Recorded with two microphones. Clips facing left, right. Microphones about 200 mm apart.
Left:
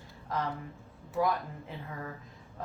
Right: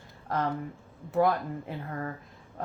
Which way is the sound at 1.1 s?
60° right (ahead or behind).